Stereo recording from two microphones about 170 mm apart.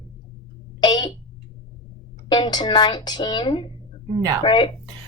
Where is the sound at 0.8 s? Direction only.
25° left (ahead or behind).